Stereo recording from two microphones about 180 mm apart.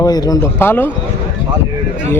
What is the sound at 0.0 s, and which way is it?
Speech, 20° left (ahead or behind).